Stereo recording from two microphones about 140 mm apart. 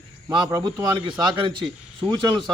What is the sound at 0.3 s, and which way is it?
Speech, 15° right (ahead or behind).